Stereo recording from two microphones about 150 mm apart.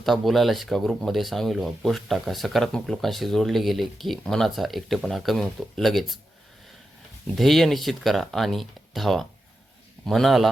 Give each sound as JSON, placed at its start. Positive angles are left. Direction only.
{"t": 0.0, "sound": "speech", "side_deg": 0}
{"t": 7.3, "sound": "speech", "side_deg": 0}